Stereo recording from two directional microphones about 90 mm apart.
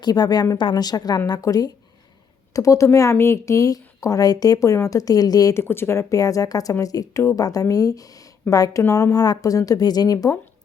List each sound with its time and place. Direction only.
0.0 s speech: 50° left (ahead or behind)
0.5 s speech: 60° left (ahead or behind)
5.5 s speech: 25° left (ahead or behind); by 10.3 s 45° left (ahead or behind)